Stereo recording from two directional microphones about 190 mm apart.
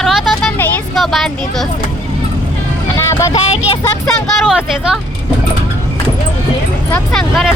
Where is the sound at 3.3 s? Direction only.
35° left (ahead or behind).